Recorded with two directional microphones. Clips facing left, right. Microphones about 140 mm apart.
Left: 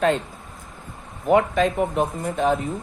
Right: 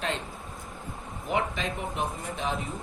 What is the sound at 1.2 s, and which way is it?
Speech, 50° left (ahead or behind).